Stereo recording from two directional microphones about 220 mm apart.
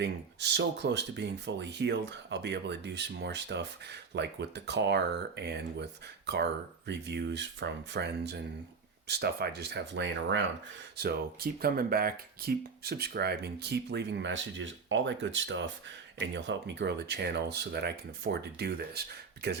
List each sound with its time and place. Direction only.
0.0 s speech: 50° right (ahead or behind)
10.9 s speech: 45° right (ahead or behind)